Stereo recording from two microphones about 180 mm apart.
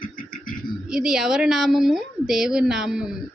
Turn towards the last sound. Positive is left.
turn(degrees=-5)  # may be behind; listen again after turning